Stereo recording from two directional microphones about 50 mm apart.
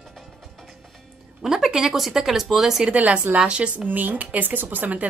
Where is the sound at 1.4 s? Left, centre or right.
Centre.